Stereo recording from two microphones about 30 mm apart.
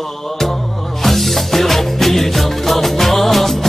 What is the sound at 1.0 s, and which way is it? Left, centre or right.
Music, centre.